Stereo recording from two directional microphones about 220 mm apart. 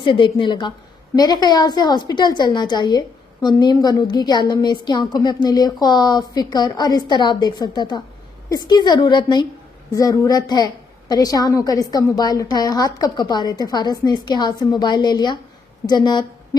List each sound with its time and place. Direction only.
0.0 s a woman's voice: 20° left (ahead or behind)